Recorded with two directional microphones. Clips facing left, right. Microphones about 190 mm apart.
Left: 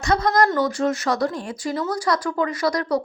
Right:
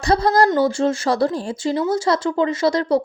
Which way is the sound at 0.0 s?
30° right (ahead or behind).